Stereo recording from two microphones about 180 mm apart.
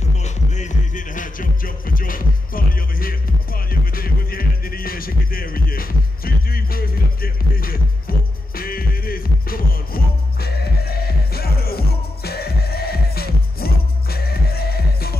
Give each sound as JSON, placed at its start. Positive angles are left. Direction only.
{"t": 0.2, "sound": "music", "side_deg": 40}